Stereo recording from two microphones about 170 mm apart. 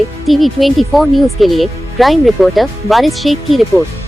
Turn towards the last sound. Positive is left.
turn(degrees=0)  # may be behind; listen again after turning